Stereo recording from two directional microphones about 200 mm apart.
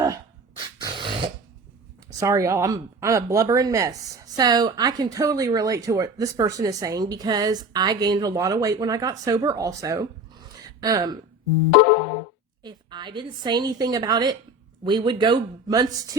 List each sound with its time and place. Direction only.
0.0 s dog: 20° right (ahead or behind)
2.1 s speech: 15° right (ahead or behind)
10.5 s a sound: 15° right (ahead or behind)
12.6 s speech: 20° right (ahead or behind)